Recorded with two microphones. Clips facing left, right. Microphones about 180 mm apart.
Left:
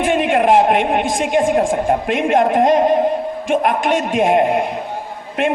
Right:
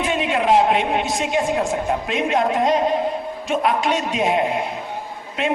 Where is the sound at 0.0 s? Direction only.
50° left (ahead or behind).